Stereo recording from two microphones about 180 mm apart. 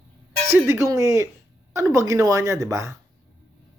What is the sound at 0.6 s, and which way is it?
Speech, 15° right (ahead or behind).